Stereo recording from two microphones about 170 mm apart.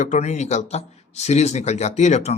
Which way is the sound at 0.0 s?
45° left (ahead or behind).